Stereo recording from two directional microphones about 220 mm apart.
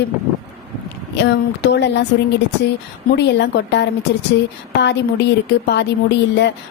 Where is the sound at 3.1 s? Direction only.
50° left (ahead or behind).